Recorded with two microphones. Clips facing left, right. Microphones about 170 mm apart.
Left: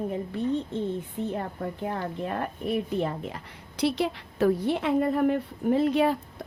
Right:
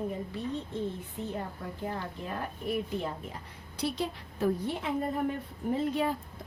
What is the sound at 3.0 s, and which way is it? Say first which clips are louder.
A woman's voice: left 6 dB; 80° left.